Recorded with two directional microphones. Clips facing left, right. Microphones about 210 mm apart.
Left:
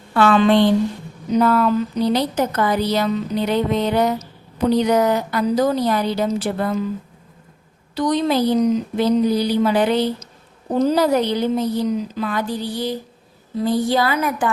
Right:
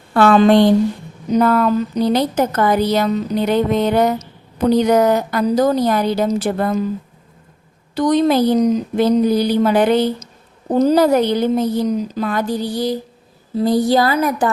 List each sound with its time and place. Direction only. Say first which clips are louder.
0.1 s a woman's voice: right 3 dB; 40° right (ahead or behind)
7.9 s a woman's voice: right 4 dB; 50° right (ahead or behind)